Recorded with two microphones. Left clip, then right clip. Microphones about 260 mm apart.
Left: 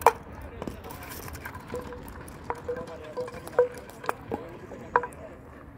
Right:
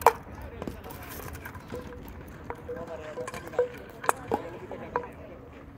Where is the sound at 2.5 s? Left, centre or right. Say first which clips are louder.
Left 4 dB; left.